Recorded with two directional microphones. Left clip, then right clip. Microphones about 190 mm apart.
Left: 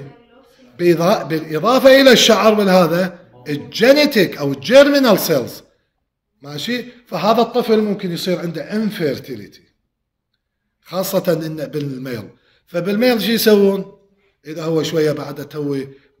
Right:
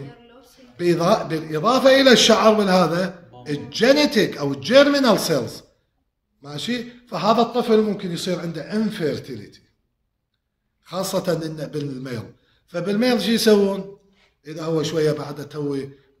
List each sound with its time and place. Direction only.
0.7 s a man's voice: 50° left (ahead or behind)
10.8 s a man's voice: 50° left (ahead or behind)